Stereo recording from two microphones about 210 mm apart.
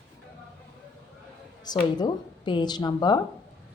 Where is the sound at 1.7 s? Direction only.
20° left (ahead or behind).